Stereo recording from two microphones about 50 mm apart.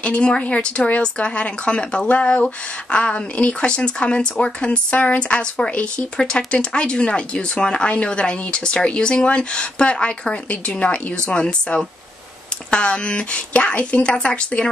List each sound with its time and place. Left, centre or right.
0.0 s speech: centre